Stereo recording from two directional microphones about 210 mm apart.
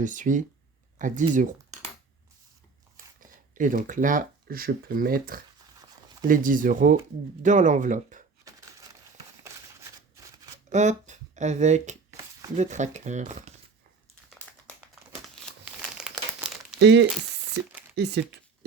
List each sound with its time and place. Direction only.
0.0 s speech: 40° right (ahead or behind)
3.5 s speech: 40° right (ahead or behind)
10.7 s speech: 35° right (ahead or behind)
15.6 s crumpling: 5° right (ahead or behind)
16.7 s speech: 55° right (ahead or behind)